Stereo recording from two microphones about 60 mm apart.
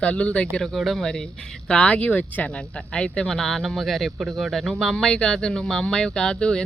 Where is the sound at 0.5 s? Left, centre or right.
Centre.